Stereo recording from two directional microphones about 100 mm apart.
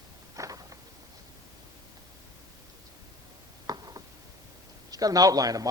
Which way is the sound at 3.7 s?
40° right (ahead or behind).